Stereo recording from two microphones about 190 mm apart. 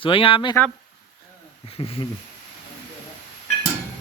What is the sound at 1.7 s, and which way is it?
Speech, 25° left (ahead or behind).